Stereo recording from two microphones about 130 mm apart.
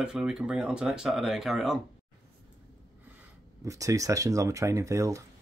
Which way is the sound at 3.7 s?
25° right (ahead or behind).